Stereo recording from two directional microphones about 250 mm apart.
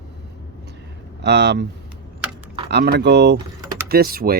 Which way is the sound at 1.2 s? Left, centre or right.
Right.